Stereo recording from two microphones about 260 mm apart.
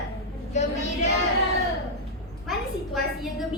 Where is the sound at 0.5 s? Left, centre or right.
Left.